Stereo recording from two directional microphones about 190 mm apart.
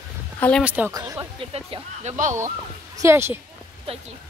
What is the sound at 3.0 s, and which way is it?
Speech, 15° right (ahead or behind).